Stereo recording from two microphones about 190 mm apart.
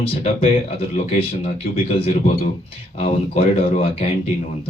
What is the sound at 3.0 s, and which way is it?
Speech, 30° left (ahead or behind).